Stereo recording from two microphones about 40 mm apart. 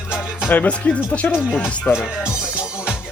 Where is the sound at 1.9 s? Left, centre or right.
Left.